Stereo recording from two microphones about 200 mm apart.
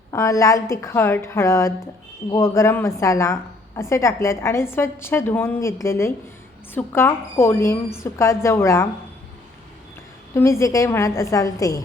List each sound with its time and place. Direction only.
0.1 s a woman's voice: 15° left (ahead or behind)
10.3 s a woman's voice: 15° left (ahead or behind)